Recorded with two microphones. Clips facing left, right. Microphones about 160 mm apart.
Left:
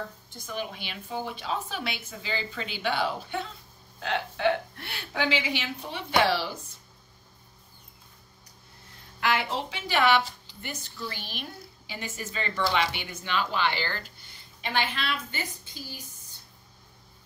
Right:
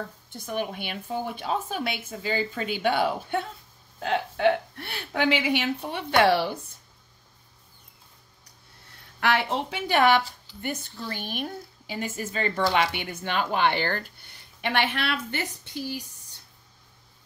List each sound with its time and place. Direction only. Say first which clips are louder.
0.5 s a woman's voice: right 5 dB; 55° right (ahead or behind)
9.2 s speech: right 3 dB; 60° right (ahead or behind)
14.6 s a woman's voice: right 4 dB; 65° right (ahead or behind)